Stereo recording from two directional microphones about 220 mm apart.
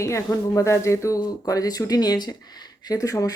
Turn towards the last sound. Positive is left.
turn(degrees=15)  # may be behind; listen again after turning